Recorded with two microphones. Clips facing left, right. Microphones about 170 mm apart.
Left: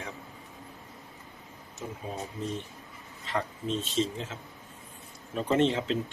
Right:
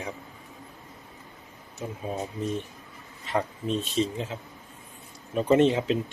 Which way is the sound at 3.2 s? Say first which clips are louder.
Right 4 dB; 15° right (ahead or behind).